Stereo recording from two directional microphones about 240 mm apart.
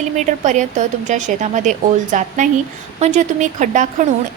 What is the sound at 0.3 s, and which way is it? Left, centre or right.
A woman's voice, right.